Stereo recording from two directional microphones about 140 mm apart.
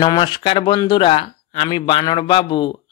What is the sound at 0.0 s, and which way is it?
Speech, 30° left (ahead or behind).